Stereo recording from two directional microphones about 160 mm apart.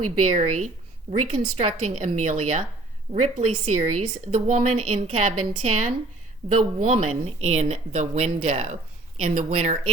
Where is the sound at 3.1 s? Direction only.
40° right (ahead or behind).